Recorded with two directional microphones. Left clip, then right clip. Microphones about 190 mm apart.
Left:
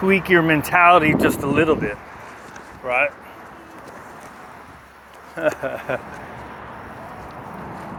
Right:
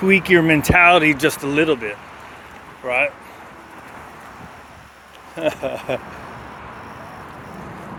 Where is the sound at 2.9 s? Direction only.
30° right (ahead or behind).